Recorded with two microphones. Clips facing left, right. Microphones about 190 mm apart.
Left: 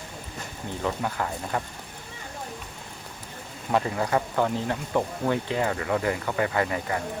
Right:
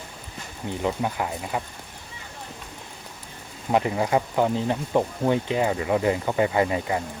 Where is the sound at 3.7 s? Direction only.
15° right (ahead or behind).